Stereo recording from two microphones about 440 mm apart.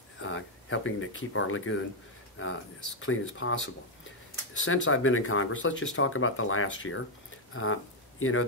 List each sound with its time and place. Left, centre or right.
0.2 s speech: left